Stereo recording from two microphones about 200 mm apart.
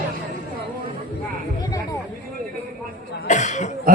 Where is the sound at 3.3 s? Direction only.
35° left (ahead or behind).